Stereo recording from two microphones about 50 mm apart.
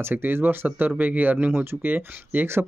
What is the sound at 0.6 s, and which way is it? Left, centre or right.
Speech, right.